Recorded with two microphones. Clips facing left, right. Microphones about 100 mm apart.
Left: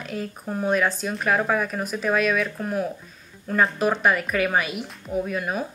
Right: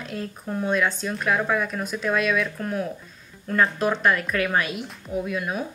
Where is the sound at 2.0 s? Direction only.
50° left (ahead or behind).